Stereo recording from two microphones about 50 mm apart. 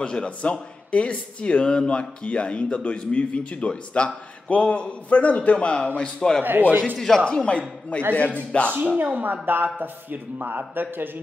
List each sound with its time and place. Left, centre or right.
0.0 s speech: centre
6.4 s a man's voice: right
7.0 s speech: centre
8.1 s a man's voice: left
8.5 s speech: left
8.8 s a man's voice: right